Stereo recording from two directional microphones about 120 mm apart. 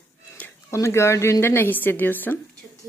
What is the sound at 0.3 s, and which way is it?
Speech, 15° left (ahead or behind).